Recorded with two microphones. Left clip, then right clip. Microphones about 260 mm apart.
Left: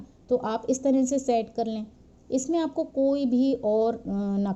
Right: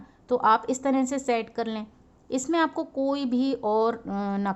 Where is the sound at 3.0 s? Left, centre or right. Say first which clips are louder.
Left 2 dB; centre.